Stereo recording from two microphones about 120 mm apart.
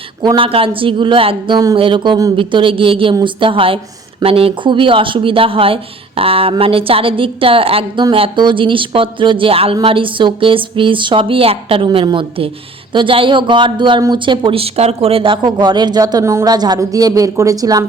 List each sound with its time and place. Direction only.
0.2 s speech: 40° right (ahead or behind)